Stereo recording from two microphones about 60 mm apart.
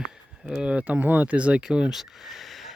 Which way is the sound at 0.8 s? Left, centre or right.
Right.